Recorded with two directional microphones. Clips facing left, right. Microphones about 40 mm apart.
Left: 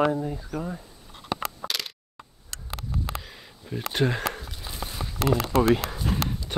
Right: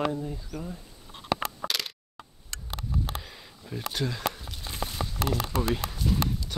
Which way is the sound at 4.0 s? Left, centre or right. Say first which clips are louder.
Left 6 dB; left.